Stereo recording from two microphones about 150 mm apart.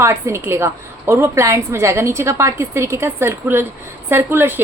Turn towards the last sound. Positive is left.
turn(degrees=-15)  # may be behind; listen again after turning